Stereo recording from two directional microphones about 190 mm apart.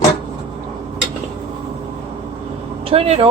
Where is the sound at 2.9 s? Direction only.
30° right (ahead or behind).